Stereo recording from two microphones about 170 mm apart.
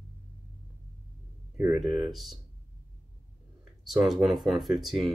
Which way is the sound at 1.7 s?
5° right (ahead or behind).